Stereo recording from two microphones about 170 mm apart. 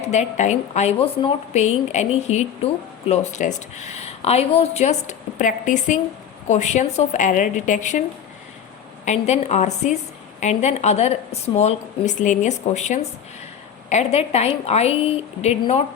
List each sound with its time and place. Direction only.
0.1 s a woman's voice: 45° left (ahead or behind)
9.0 s a woman's voice: 40° left (ahead or behind)